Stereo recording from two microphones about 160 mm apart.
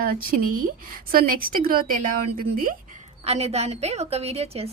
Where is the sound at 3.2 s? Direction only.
40° right (ahead or behind).